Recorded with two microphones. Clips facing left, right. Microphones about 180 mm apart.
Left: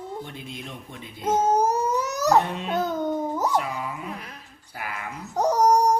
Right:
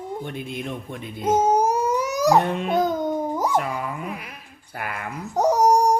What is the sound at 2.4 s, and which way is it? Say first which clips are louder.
Speech: right 6 dB; 55° right (ahead or behind).